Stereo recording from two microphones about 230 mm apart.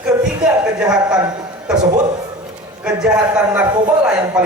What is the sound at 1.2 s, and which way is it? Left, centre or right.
Speech, centre.